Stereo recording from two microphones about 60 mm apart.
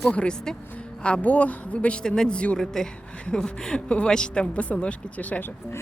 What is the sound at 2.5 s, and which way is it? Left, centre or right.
Speech, centre.